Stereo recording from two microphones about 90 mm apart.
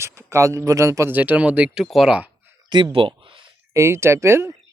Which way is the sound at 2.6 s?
60° right (ahead or behind).